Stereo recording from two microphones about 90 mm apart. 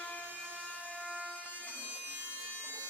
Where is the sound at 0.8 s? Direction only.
15° left (ahead or behind).